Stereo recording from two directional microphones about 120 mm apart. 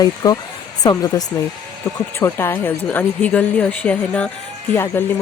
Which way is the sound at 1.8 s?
20° left (ahead or behind).